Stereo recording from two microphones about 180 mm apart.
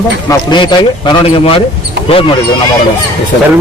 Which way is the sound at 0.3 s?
25° left (ahead or behind).